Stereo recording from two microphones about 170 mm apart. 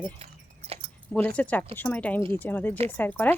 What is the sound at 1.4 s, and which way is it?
Speech, 10° left (ahead or behind).